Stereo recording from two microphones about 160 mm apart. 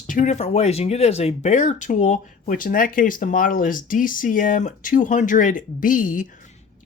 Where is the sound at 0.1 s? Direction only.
50° left (ahead or behind).